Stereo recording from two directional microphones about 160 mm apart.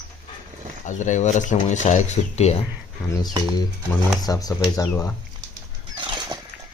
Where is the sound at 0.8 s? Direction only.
50° left (ahead or behind).